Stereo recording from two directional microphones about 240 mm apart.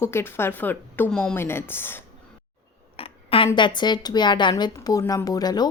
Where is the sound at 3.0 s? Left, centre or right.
Left.